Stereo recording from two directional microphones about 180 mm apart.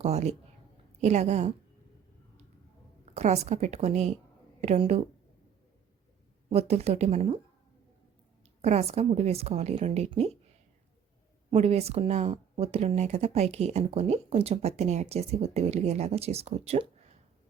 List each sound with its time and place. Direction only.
0.0 s speech: 35° right (ahead or behind)
3.2 s speech: 35° right (ahead or behind)
6.5 s speech: 35° right (ahead or behind)
8.6 s speech: 35° right (ahead or behind)
11.5 s speech: 35° right (ahead or behind)